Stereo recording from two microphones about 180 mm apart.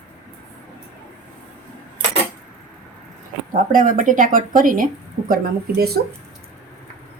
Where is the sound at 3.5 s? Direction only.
50° right (ahead or behind).